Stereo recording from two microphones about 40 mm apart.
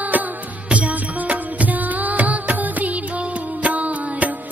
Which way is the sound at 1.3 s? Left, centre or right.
Right.